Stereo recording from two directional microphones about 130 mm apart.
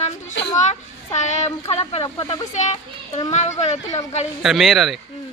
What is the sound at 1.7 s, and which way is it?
Speech, 50° left (ahead or behind).